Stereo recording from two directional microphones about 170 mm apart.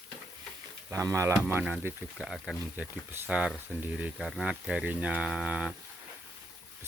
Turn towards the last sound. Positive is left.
turn(degrees=-5)  # may be behind; listen again after turning